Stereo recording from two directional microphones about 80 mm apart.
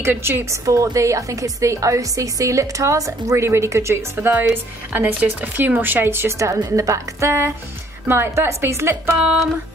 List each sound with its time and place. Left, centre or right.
0.0 s a woman's voice: right